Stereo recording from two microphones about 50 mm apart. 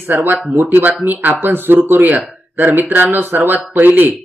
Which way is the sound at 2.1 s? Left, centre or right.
Right.